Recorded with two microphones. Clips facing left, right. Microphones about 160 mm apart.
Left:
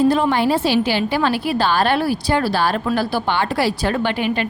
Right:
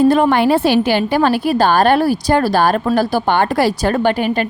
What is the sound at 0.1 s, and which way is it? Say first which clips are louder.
A woman's voice: right 4 dB; 55° right (ahead or behind).